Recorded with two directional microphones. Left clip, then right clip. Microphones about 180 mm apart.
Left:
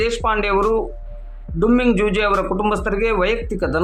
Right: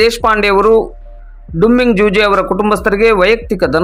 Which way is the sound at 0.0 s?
30° right (ahead or behind).